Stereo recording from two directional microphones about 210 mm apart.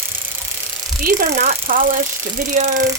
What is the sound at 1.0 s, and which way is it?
Speech, 45° right (ahead or behind).